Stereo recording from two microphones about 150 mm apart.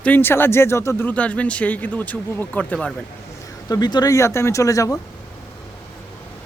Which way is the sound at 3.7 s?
30° left (ahead or behind).